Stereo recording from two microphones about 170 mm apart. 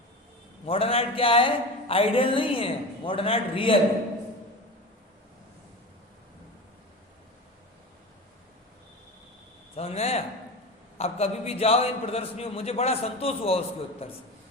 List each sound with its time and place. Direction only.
0.6 s a man's voice: 35° left (ahead or behind)
9.7 s a sound: 35° left (ahead or behind)
10.9 s a man's voice: 35° left (ahead or behind)